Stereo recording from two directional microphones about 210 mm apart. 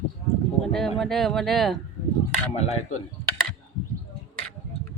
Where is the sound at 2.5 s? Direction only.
30° left (ahead or behind).